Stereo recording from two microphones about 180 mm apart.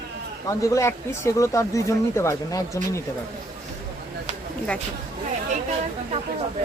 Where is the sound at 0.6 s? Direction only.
15° left (ahead or behind).